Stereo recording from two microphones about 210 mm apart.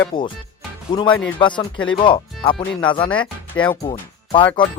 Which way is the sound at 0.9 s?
20° left (ahead or behind).